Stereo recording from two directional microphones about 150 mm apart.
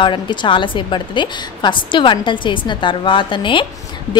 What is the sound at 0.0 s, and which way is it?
A woman's voice, 30° left (ahead or behind).